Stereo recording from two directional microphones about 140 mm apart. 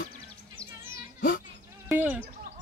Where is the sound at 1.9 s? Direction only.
10° right (ahead or behind).